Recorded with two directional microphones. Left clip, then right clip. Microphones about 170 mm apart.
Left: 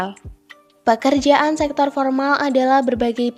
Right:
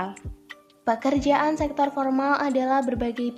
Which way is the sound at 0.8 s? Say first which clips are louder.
Left 7 dB; 35° left (ahead or behind).